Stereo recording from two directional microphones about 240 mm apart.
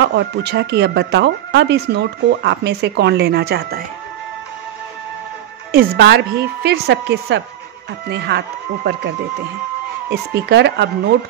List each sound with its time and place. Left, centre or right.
0.1 s speech: right
5.7 s speech: right
10.0 s speech: right